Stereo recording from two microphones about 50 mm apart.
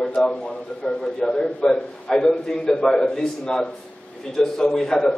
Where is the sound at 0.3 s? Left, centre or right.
Centre.